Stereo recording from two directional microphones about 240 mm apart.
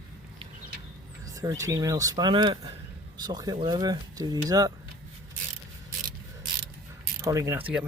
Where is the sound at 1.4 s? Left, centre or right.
Centre.